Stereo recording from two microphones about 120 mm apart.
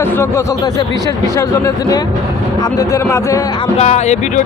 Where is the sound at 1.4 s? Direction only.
25° left (ahead or behind).